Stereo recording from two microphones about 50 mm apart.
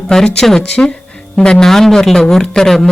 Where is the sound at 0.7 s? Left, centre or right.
Left.